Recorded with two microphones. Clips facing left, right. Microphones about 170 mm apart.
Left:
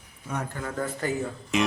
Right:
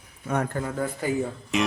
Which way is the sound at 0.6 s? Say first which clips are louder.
Right 2 dB; 10° right (ahead or behind).